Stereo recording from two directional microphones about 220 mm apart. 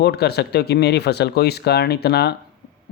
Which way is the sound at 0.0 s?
45° left (ahead or behind).